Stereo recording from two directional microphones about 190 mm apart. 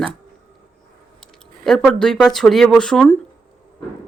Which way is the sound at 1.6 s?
5° left (ahead or behind).